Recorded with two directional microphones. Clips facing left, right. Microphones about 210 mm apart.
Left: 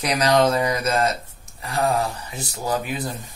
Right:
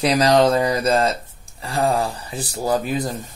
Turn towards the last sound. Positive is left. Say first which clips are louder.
# right 4 dB
turn(degrees=-40)  # may be behind; listen again after turning